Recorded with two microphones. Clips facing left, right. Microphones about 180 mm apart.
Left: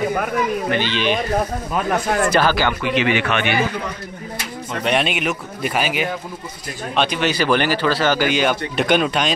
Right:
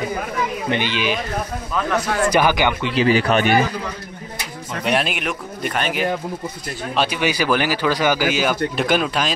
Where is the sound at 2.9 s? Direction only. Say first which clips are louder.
Right 5 dB; 35° right (ahead or behind).